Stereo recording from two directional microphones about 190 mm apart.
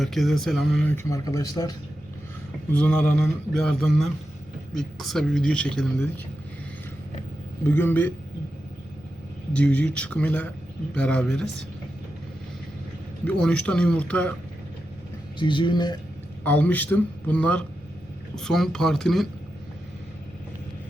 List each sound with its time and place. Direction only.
0.0 s speech: centre (ahead or behind); by 1.7 s 20° left (ahead or behind)
2.7 s speech: 5° left (ahead or behind)
7.7 s a man's voice: 10° left (ahead or behind)
9.5 s speech: 5° left (ahead or behind)
13.2 s speech: 5° left (ahead or behind)
15.4 s speech: 25° left (ahead or behind)
16.4 s a man's voice: 10° left (ahead or behind)